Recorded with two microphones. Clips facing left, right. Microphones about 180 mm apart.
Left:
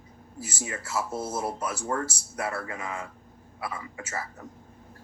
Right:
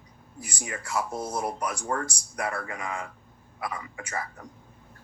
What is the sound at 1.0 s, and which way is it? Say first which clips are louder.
Speech: even; 5° left (ahead or behind).